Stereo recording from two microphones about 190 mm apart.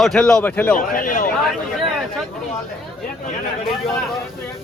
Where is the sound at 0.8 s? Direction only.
45° left (ahead or behind).